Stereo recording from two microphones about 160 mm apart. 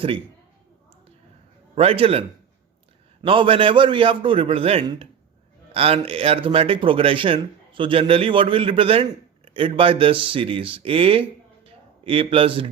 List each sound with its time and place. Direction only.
1.7 s speech: 40° right (ahead or behind)